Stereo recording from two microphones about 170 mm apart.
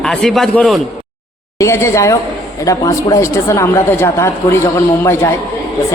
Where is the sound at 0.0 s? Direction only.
5° left (ahead or behind).